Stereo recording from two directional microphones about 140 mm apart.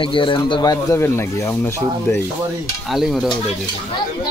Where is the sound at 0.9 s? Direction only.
15° left (ahead or behind).